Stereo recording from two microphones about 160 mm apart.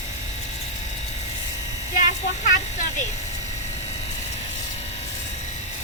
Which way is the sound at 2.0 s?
50° left (ahead or behind).